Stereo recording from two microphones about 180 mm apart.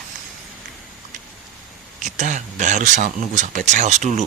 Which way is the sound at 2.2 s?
40° right (ahead or behind).